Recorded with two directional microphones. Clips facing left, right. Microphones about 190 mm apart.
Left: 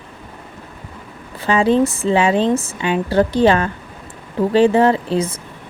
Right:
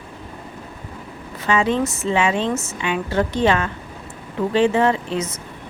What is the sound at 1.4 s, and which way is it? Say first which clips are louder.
Speech: left 5 dB; 35° left (ahead or behind).